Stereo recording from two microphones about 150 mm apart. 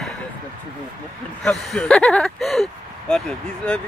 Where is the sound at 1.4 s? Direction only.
Centre (ahead or behind).